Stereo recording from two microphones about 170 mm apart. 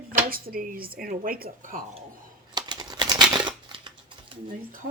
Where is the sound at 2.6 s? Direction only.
25° right (ahead or behind).